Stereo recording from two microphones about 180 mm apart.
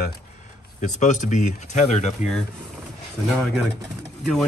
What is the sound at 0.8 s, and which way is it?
Speech, 45° left (ahead or behind).